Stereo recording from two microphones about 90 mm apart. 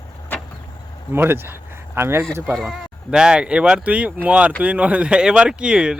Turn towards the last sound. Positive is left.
turn(degrees=-10)  # may be behind; listen again after turning